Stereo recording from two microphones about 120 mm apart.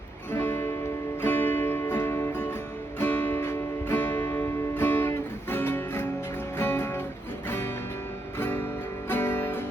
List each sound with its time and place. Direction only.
0.3 s music: 20° left (ahead or behind)